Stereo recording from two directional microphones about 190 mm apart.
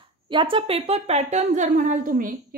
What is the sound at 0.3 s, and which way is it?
A woman's voice, 25° right (ahead or behind).